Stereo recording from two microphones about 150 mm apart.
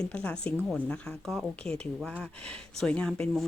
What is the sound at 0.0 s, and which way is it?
Speech, 10° left (ahead or behind).